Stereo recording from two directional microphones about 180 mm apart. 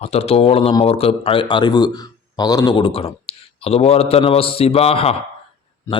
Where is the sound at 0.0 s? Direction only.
35° left (ahead or behind).